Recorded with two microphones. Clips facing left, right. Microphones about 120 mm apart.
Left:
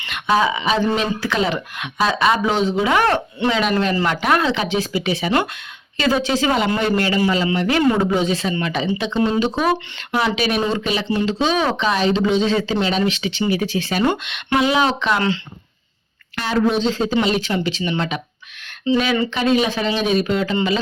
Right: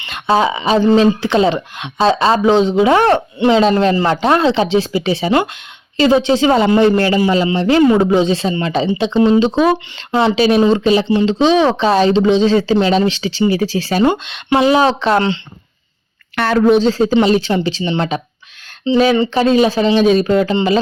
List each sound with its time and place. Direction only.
0.0 s speech: 30° right (ahead or behind)
9.1 s speech: 20° right (ahead or behind); by 15.2 s 35° right (ahead or behind)
16.3 s speech: 60° right (ahead or behind)
16.7 s speech: 40° right (ahead or behind)